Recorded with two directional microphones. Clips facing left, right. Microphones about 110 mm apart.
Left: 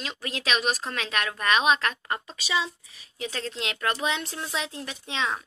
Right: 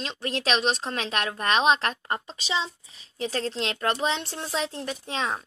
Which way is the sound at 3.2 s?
40° right (ahead or behind).